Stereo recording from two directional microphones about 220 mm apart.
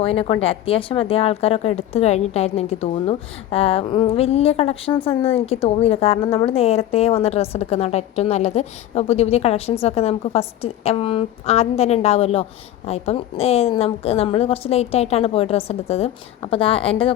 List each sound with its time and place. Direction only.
0.0 s a woman's voice: 25° left (ahead or behind)